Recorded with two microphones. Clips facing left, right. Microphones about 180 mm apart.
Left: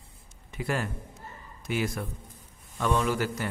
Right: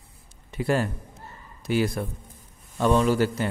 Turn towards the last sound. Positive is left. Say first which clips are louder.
# right 6 dB
turn(degrees=-30)  # may be behind; listen again after turning